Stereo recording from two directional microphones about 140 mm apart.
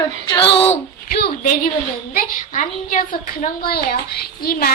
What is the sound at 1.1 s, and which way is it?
Speech, 90° left.